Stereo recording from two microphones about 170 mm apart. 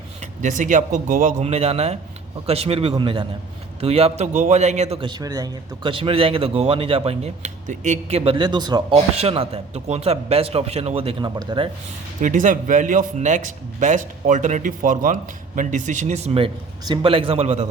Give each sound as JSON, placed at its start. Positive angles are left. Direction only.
{"t": 0.2, "sound": "a man's voice", "side_deg": -50}
{"t": 9.1, "sound": "a man's voice", "side_deg": -35}
{"t": 12.2, "sound": "speech", "side_deg": -50}